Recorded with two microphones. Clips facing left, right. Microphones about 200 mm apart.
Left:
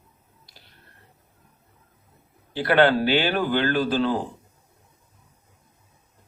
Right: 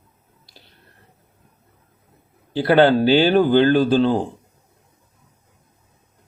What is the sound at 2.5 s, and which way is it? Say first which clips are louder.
Speech: right 4 dB; 30° right (ahead or behind).